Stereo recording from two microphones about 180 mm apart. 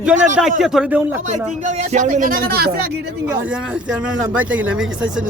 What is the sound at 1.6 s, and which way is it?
Speech, 40° right (ahead or behind).